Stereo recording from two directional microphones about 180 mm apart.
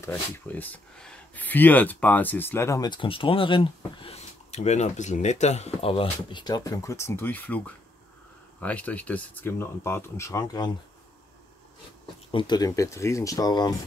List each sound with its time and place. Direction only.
0.0 s speech: 10° left (ahead or behind)
12.3 s speech: 25° left (ahead or behind)